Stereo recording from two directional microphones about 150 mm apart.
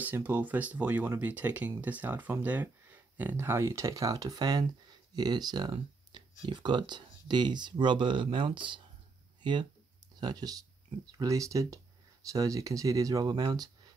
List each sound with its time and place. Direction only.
0.0 s speech: 10° right (ahead or behind); by 13.7 s 25° right (ahead or behind)